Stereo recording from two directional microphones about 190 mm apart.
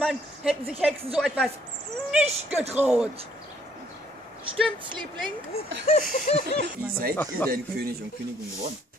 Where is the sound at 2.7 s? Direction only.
5° right (ahead or behind).